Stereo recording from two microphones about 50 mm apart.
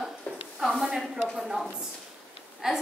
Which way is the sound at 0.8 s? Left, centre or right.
Centre.